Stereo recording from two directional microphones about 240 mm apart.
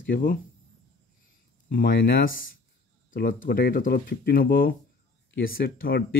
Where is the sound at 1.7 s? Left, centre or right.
Left.